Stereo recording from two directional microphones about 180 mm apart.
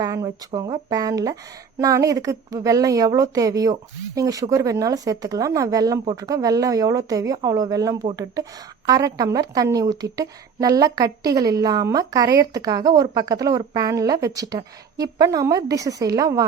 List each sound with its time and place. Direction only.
0.0 s a woman's voice: 20° right (ahead or behind)